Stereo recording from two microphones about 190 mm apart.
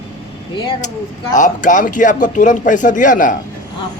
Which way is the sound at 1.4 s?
40° left (ahead or behind).